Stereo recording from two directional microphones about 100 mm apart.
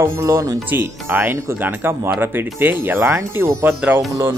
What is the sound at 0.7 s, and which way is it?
Speech, 20° right (ahead or behind).